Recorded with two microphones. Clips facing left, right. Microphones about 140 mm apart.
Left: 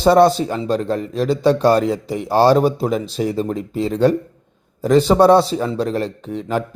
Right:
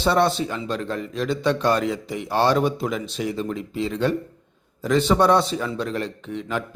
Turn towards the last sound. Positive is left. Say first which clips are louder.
# left 6 dB
turn(degrees=40)  # may be behind; listen again after turning